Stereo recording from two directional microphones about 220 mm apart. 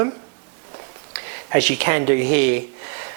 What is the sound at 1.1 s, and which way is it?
Speech, 10° right (ahead or behind).